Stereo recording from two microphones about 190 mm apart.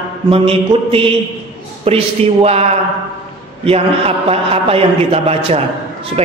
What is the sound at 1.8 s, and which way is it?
A man's voice, 35° right (ahead or behind).